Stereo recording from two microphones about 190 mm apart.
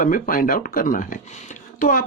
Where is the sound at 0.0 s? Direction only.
45° left (ahead or behind).